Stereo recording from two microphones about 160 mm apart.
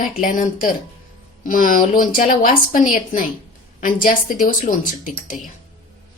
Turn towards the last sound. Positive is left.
turn(degrees=55)  # may be behind; listen again after turning